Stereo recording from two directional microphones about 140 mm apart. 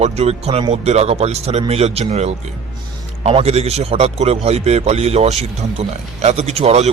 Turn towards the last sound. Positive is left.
turn(degrees=-50)  # may be behind; listen again after turning